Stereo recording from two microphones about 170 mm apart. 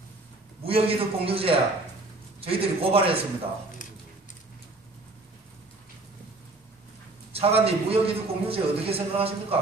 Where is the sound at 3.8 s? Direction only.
50° left (ahead or behind).